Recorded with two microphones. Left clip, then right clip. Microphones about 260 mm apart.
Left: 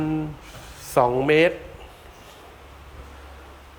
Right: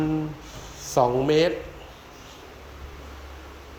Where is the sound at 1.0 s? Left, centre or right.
Centre.